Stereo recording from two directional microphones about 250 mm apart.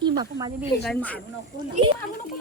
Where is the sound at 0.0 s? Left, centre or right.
Centre.